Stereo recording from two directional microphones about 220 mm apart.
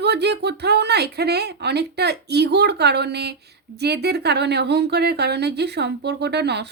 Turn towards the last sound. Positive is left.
turn(degrees=-50)  # may be behind; listen again after turning